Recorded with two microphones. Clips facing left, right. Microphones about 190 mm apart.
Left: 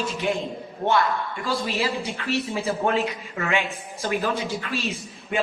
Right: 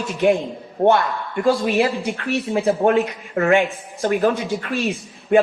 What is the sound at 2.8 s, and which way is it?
Speech, 40° right (ahead or behind).